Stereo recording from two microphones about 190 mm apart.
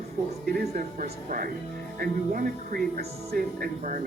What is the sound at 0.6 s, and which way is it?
A man's voice, 50° right (ahead or behind).